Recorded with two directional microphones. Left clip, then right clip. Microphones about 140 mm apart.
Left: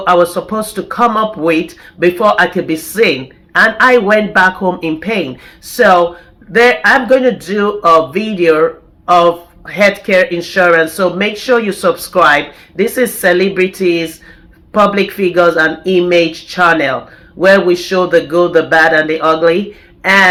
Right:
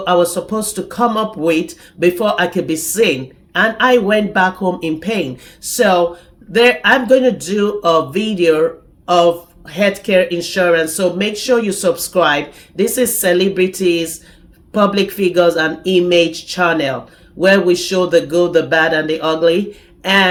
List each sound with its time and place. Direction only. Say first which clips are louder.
0.0 s speech: left 4 dB; 25° right (ahead or behind)